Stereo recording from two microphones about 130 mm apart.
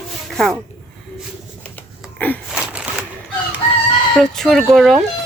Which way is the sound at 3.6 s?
60° left (ahead or behind).